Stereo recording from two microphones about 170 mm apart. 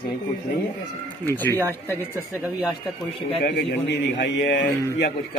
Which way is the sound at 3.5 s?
85° left.